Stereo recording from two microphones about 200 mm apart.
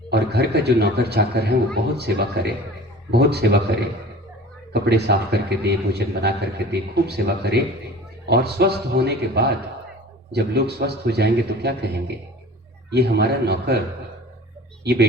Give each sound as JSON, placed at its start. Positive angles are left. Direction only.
{"t": 0.1, "sound": "a man's voice", "side_deg": -55}
{"t": 4.7, "sound": "a man's voice", "side_deg": -55}
{"t": 12.9, "sound": "a man's voice", "side_deg": -55}